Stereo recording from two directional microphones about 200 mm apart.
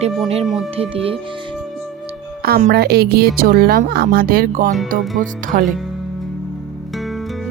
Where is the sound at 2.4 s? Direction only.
45° right (ahead or behind).